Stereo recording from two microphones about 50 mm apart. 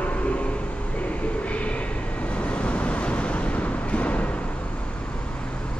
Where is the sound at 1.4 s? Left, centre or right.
Left.